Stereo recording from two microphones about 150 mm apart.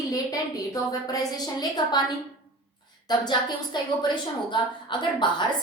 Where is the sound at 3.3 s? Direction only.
30° left (ahead or behind).